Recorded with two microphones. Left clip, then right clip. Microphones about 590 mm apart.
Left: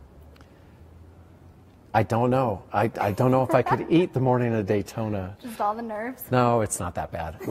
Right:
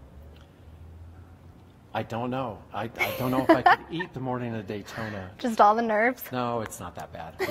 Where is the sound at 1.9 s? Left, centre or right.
Left.